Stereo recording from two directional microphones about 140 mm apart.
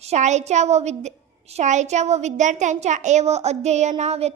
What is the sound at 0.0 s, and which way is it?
A woman's voice, 55° right (ahead or behind).